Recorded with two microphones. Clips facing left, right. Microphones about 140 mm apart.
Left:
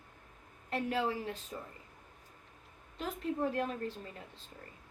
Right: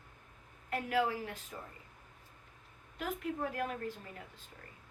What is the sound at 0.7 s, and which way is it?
Speech, 30° left (ahead or behind).